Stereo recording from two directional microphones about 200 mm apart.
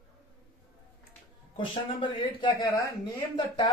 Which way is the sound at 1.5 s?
25° left (ahead or behind).